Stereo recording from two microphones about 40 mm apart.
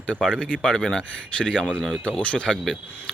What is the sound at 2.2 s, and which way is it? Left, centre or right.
Speech, left.